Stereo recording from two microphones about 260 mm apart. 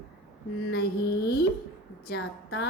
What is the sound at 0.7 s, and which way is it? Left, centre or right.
A woman's voice, left.